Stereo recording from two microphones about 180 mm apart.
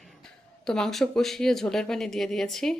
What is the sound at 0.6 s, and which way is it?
Speech, 5° left (ahead or behind).